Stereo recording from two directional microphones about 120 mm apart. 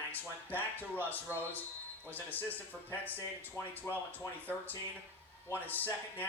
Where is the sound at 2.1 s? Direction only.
15° left (ahead or behind).